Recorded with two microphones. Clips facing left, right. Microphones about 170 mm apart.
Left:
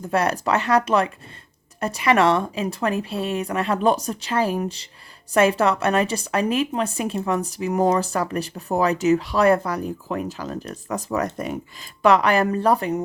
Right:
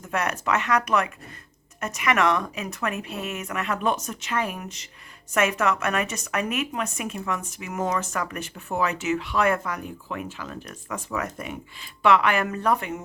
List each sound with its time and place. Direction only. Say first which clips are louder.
0.0 s a woman's voice: left 6 dB; 35° left (ahead or behind)